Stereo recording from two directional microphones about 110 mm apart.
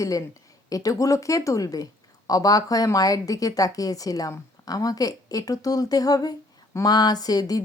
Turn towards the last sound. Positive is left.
turn(degrees=35)  # may be behind; listen again after turning